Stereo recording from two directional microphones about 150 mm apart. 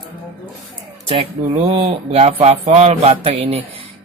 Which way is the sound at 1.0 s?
40° right (ahead or behind).